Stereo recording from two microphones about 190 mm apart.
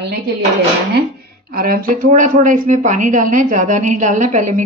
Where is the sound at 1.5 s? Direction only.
50° right (ahead or behind).